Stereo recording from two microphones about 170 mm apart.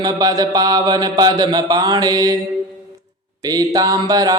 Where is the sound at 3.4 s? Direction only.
20° right (ahead or behind).